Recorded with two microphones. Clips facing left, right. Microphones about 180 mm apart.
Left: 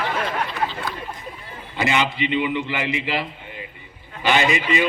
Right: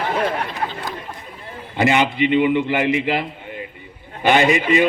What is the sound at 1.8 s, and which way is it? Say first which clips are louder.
A man's voice: right 5 dB; 50° right (ahead or behind).